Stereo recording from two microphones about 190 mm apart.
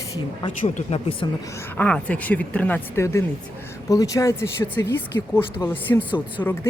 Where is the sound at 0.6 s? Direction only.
30° left (ahead or behind).